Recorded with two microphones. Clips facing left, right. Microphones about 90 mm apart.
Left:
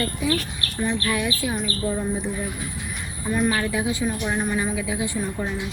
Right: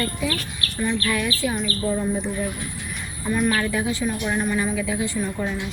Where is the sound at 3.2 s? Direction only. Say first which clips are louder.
Right 1 dB; 15° left (ahead or behind).